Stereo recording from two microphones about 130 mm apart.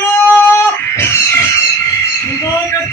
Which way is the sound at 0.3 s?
20° left (ahead or behind).